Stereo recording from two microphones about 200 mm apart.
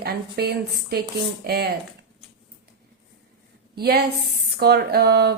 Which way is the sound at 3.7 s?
50° right (ahead or behind).